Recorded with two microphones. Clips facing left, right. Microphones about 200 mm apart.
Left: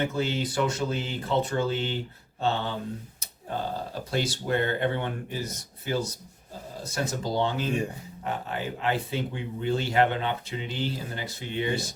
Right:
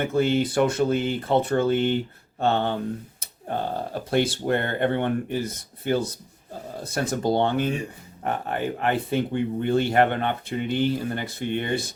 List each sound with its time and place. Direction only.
0.0 s speech: 55° right (ahead or behind)
4.1 s speech: 55° right (ahead or behind)